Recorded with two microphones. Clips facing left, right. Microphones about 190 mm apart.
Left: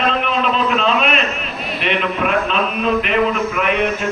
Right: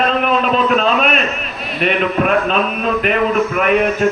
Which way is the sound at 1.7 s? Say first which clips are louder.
Right 4 dB; 45° right (ahead or behind).